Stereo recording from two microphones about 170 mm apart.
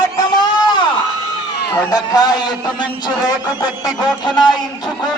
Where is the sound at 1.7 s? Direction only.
25° left (ahead or behind).